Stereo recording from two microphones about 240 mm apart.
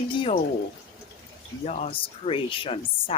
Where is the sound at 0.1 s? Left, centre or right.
Left.